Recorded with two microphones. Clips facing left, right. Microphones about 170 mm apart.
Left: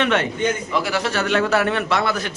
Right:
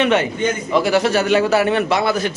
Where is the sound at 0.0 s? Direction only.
5° right (ahead or behind).